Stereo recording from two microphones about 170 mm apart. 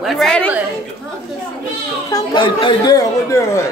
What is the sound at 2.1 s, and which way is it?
A child's voice, 25° left (ahead or behind).